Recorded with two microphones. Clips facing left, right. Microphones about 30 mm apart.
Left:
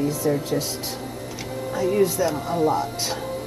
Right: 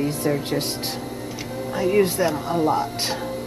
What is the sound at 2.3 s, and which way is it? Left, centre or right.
Speech, centre.